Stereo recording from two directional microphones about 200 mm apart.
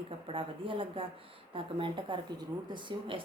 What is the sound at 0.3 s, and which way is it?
Speech, 25° right (ahead or behind).